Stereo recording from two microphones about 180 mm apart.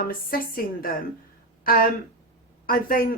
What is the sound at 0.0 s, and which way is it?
Speech, 50° left (ahead or behind).